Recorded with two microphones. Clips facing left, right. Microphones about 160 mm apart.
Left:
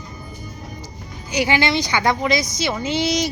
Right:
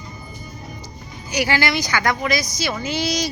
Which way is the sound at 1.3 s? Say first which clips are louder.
Left 2 dB; 20° left (ahead or behind).